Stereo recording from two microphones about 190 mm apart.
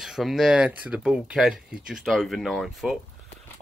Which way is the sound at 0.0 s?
Centre (ahead or behind).